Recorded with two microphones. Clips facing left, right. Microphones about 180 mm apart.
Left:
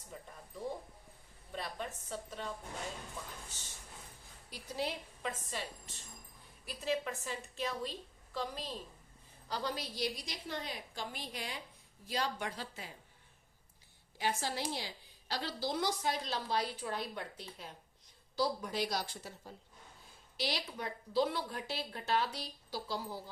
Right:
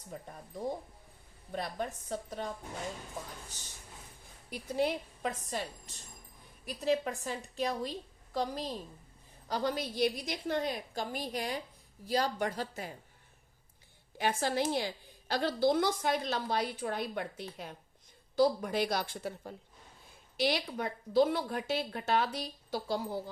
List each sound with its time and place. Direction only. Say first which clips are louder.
0.1 s a woman's voice: right 5 dB; 45° right (ahead or behind)
4.4 s a woman's voice: right 7 dB; 50° right (ahead or behind)
6.7 s a woman's voice: right 5 dB; 45° right (ahead or behind)
14.2 s a woman's voice: right 6 dB; 55° right (ahead or behind)